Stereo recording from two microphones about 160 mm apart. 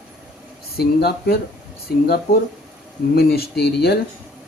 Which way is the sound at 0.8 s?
80° left.